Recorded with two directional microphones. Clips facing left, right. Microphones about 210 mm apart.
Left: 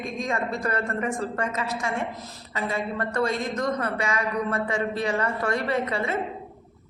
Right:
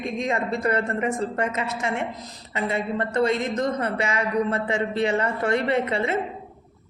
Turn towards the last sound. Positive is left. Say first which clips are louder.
# right 3 dB
turn(degrees=-25)  # may be behind; listen again after turning